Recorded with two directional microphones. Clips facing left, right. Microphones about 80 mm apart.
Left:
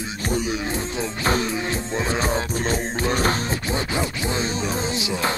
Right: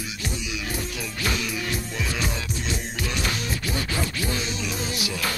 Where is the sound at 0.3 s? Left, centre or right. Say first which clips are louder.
Left 12 dB; left.